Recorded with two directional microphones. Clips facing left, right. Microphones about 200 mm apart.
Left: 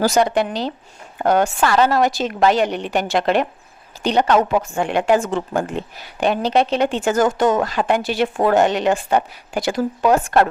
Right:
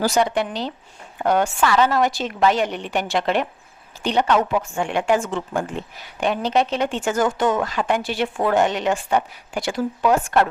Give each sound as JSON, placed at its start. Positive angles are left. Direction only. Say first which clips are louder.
{"t": 0.0, "sound": "a woman's voice", "louder": "left 3 dB", "side_deg": 40}